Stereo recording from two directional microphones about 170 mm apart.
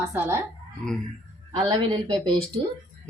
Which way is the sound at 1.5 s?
25° right (ahead or behind).